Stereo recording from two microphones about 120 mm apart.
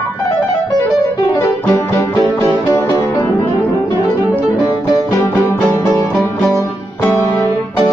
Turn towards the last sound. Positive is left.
turn(degrees=20)  # may be behind; listen again after turning